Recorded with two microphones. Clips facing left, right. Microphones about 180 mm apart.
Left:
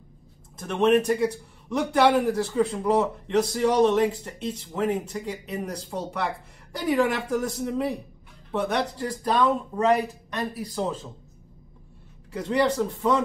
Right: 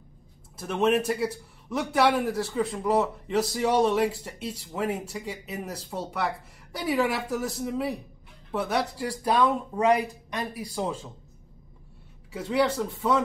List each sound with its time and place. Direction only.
0.6 s a man's voice: 5° right (ahead or behind)
12.3 s a man's voice: 5° right (ahead or behind)